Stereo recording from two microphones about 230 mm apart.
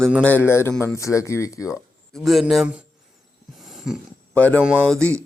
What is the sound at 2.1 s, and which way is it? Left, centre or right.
Speech, centre.